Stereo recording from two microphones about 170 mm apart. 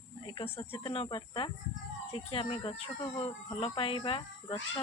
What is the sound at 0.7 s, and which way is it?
Speech, 30° left (ahead or behind).